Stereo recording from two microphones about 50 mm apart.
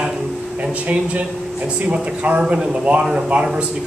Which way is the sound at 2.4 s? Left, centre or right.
Centre.